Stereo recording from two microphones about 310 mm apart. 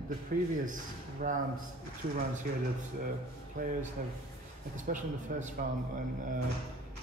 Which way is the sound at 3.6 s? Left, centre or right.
Right.